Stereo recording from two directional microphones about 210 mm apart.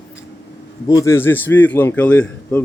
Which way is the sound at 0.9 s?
15° left (ahead or behind).